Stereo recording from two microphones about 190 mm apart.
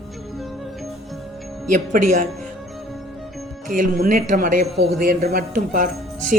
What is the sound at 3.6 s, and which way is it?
Speech, 45° right (ahead or behind).